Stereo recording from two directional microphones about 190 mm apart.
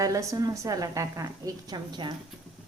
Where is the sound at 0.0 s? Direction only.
15° right (ahead or behind).